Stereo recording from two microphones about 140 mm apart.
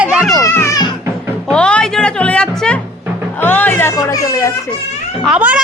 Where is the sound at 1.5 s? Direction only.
5° left (ahead or behind).